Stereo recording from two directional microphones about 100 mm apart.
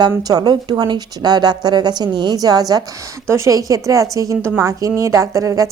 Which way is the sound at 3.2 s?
30° right (ahead or behind).